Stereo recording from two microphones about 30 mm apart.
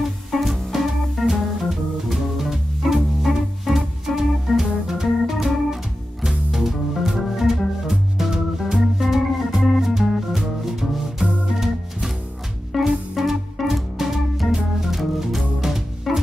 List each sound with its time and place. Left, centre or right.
0.5 s music: centre
3.7 s organ: centre
6.2 s music: centre
7.1 s organ: centre
9.9 s music: centre
14.5 s music: centre